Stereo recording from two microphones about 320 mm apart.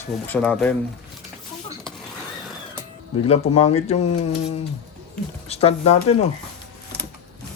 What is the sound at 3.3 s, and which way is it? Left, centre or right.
Speech, centre.